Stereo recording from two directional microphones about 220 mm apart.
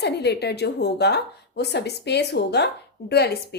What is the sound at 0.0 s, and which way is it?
A woman's voice, 50° left (ahead or behind).